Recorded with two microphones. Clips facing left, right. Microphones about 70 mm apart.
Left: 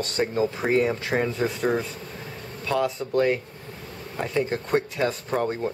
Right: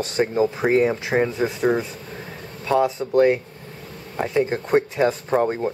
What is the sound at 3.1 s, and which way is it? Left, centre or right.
Speech, centre.